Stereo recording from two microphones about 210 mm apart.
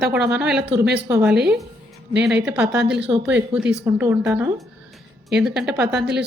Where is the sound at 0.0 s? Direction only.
5° right (ahead or behind).